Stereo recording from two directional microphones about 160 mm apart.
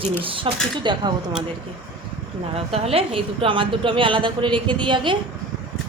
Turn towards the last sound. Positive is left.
turn(degrees=-30)  # may be behind; listen again after turning